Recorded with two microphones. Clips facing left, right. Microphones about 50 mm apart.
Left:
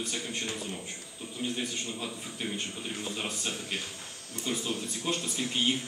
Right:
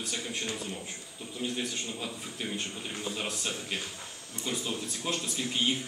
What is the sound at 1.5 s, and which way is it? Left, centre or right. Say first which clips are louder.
A man's voice: even; centre.